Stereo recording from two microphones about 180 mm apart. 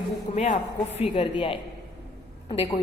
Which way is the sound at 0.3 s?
35° left (ahead or behind).